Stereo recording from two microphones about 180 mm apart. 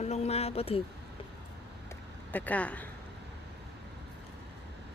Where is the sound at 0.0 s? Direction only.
35° left (ahead or behind).